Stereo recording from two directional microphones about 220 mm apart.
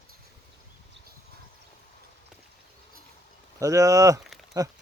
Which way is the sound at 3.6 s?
15° right (ahead or behind).